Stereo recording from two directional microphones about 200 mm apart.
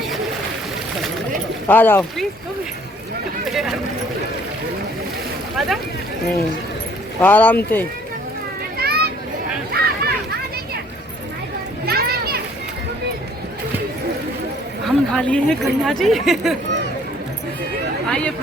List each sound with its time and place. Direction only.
1.6 s speech: 10° left (ahead or behind)
3.5 s speech: centre (ahead or behind)
5.5 s speech: centre (ahead or behind)
7.2 s speech: 10° left (ahead or behind)
8.8 s a sound: 50° right (ahead or behind)
11.9 s children playing: 50° right (ahead or behind)
14.8 s speech: 5° left (ahead or behind)
18.1 s speech: 5° left (ahead or behind)